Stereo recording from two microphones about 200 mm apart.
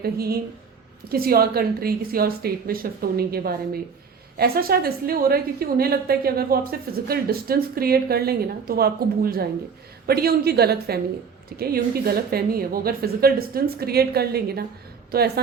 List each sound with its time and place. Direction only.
0.0 s a woman's voice: 50° right (ahead or behind)